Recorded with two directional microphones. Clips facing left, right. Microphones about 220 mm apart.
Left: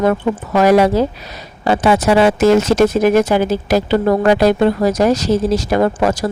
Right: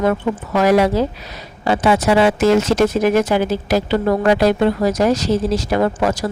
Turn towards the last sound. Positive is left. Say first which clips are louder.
# left 2 dB
turn(degrees=40)  # may be behind; listen again after turning